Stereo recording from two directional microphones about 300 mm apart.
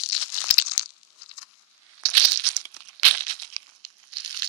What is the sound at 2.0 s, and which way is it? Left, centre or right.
Crumpling, right.